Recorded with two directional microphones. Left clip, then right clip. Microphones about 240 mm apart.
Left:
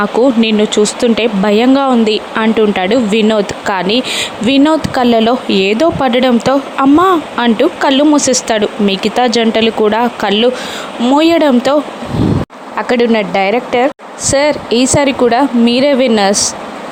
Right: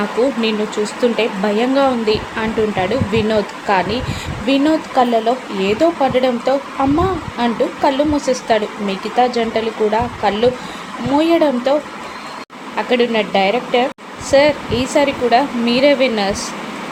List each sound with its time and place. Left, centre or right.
0.4 s speech: left